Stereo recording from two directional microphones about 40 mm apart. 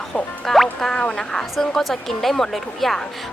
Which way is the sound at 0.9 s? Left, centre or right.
Left.